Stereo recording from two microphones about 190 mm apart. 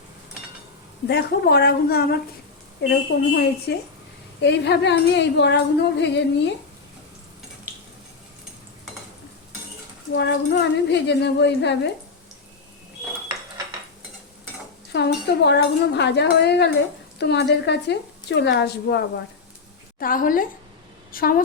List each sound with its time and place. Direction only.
1.0 s a woman's voice: 60° left (ahead or behind)
10.1 s a woman's voice: 65° left (ahead or behind)
14.9 s a woman's voice: 65° left (ahead or behind)
20.0 s a woman's voice: 45° left (ahead or behind)